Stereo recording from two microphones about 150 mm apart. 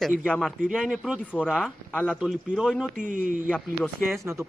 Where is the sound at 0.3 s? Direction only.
Centre (ahead or behind).